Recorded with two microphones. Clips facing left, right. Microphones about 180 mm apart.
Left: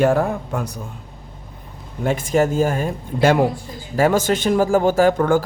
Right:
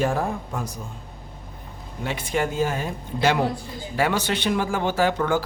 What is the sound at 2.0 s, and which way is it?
Speech, 45° left (ahead or behind).